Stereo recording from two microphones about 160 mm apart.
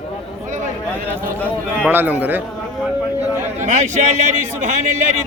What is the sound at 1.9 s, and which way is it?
Speech, 10° right (ahead or behind).